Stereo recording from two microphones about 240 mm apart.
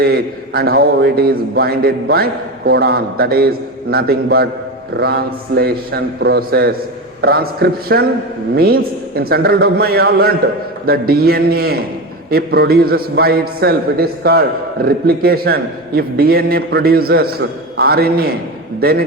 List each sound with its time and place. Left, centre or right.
0.0 s a man's voice: right